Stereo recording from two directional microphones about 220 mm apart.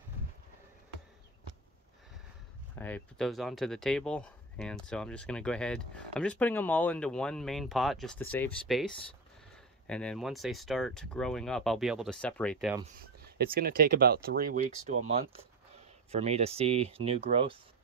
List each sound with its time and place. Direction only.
2.8 s speech: 5° left (ahead or behind)
13.2 s speech: 45° right (ahead or behind)
16.1 s speech: 30° right (ahead or behind)